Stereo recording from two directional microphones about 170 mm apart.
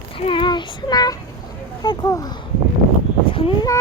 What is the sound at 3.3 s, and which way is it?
Speech, 30° left (ahead or behind).